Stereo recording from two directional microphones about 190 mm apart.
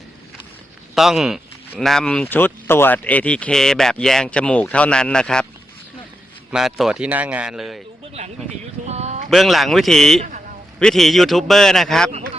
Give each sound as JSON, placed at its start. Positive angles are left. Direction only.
{"t": 0.9, "sound": "a man's voice", "side_deg": 0}
{"t": 6.5, "sound": "a man's voice", "side_deg": 0}
{"t": 8.9, "sound": "a sound", "side_deg": -35}
{"t": 9.3, "sound": "a man's voice", "side_deg": 0}